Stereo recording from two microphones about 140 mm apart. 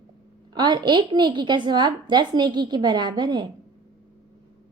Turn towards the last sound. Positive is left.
turn(degrees=-30)  # may be behind; listen again after turning